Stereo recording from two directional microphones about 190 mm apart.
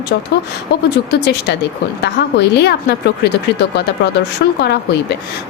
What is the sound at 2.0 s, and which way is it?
A woman's voice, 60° left (ahead or behind).